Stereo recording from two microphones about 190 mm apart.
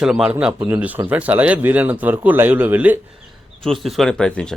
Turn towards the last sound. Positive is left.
turn(degrees=5)  # may be behind; listen again after turning